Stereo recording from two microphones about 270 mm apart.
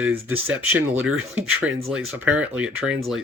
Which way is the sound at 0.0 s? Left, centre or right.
Centre.